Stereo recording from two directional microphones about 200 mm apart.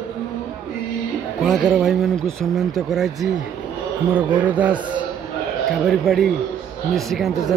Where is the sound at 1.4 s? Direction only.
Centre (ahead or behind).